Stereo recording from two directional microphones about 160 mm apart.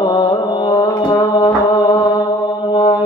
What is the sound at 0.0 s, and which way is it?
Mantra, 30° left (ahead or behind).